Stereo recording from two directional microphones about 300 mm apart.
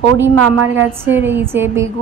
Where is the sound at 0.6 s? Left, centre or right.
Right.